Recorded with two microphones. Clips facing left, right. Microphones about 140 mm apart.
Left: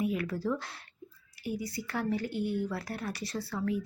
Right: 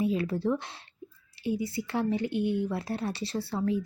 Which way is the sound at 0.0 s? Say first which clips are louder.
Right 4 dB; 25° right (ahead or behind).